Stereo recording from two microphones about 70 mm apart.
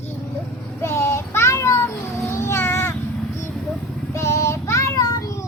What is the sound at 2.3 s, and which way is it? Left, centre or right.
Cat, left.